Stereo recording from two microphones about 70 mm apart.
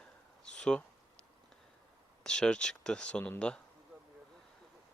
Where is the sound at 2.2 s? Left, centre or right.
Centre.